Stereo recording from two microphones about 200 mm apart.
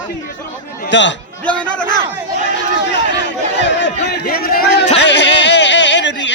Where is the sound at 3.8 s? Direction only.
50° left (ahead or behind).